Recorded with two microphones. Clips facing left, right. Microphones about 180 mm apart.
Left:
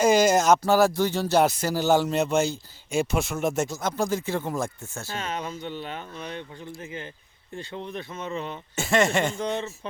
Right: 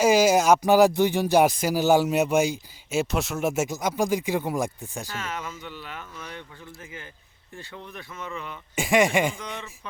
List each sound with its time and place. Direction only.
0.0 s speech: 10° right (ahead or behind)
5.1 s speech: 20° left (ahead or behind)
8.7 s speech: 15° right (ahead or behind)
9.4 s speech: 30° left (ahead or behind)